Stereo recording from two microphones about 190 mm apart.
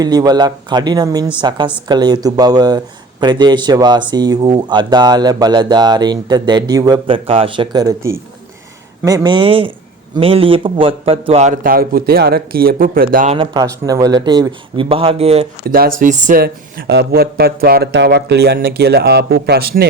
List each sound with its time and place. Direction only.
0.0 s a man's voice: 20° right (ahead or behind); by 13.3 s 50° right (ahead or behind)
13.3 s speech: 25° right (ahead or behind); by 19.9 s 55° right (ahead or behind)